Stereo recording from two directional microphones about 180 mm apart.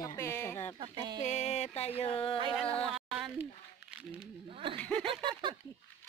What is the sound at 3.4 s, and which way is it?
Crumpling, 10° right (ahead or behind).